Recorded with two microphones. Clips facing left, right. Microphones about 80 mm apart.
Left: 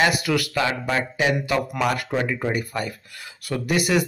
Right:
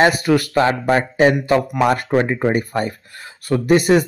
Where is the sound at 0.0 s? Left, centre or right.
Right.